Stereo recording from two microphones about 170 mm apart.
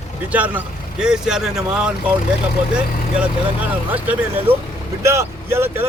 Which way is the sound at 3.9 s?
10° right (ahead or behind).